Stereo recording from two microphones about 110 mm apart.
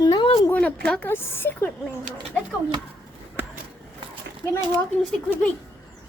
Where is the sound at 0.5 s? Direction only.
10° left (ahead or behind).